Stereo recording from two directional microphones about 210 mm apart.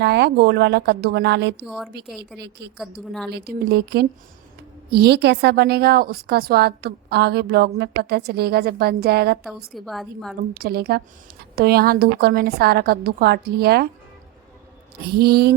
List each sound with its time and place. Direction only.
0.0 s a woman's voice: 50° right (ahead or behind)
1.6 s a woman's voice: centre (ahead or behind)
1.9 s a woman's voice: 50° right (ahead or behind)
3.1 s a woman's voice: centre (ahead or behind)
3.3 s a woman's voice: 50° right (ahead or behind)
9.4 s a woman's voice: centre (ahead or behind)
10.5 s a woman's voice: 45° right (ahead or behind)
15.1 s a woman's voice: 50° right (ahead or behind)